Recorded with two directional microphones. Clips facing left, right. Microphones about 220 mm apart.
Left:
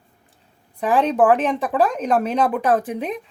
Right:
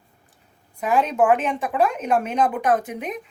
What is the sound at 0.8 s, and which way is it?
Speech, 30° left (ahead or behind).